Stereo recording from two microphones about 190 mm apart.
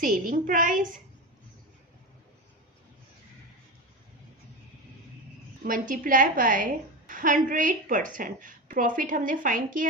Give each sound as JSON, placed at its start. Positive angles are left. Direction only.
{"t": 0.0, "sound": "a woman's voice", "side_deg": -45}
{"t": 5.6, "sound": "a woman's voice", "side_deg": -45}